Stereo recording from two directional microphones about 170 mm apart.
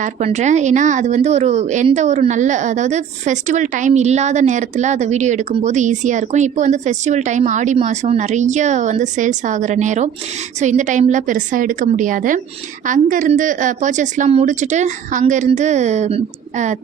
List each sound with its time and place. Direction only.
0.0 s speech: 40° right (ahead or behind)